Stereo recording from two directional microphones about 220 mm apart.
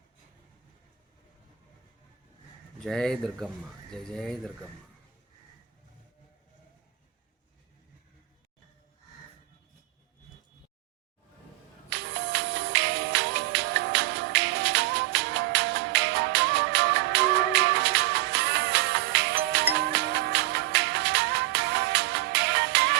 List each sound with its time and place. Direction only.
2.8 s speech: centre (ahead or behind)
11.9 s music: 50° right (ahead or behind)